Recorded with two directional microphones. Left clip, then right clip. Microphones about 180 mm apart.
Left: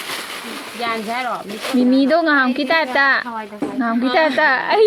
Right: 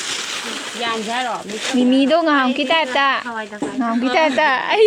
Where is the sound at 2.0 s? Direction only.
Centre (ahead or behind).